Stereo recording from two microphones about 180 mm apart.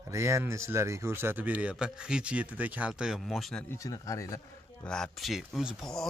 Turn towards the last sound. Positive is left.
turn(degrees=0)  # may be behind; listen again after turning